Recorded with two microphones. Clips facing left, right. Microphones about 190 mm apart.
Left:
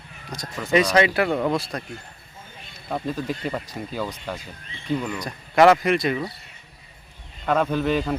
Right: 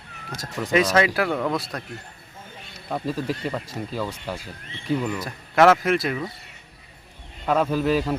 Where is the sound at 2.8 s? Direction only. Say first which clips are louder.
Even; 5° right (ahead or behind).